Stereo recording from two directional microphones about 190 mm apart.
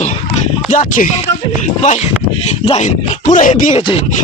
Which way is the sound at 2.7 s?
40° left (ahead or behind).